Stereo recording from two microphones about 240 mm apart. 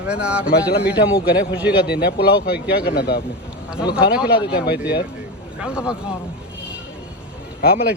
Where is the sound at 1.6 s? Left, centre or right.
Centre.